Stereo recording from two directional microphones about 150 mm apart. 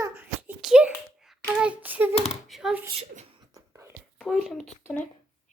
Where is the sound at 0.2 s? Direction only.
10° right (ahead or behind).